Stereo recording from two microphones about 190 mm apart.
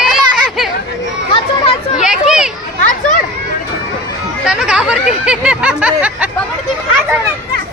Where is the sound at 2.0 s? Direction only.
5° right (ahead or behind).